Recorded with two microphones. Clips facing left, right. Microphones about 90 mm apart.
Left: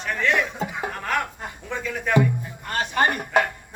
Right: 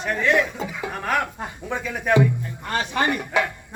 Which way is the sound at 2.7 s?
50° left (ahead or behind).